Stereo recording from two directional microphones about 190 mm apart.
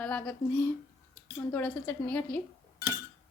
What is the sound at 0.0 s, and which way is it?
A woman's voice, 5° left (ahead or behind).